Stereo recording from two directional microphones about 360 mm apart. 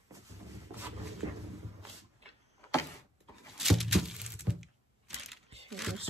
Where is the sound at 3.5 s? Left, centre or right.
Centre.